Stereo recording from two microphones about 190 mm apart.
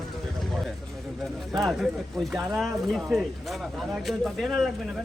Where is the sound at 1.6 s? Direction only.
Centre (ahead or behind).